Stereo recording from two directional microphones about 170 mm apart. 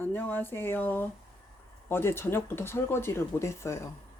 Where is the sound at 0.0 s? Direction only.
10° left (ahead or behind).